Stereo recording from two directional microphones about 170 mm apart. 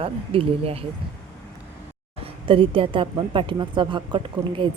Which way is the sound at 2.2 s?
30° right (ahead or behind).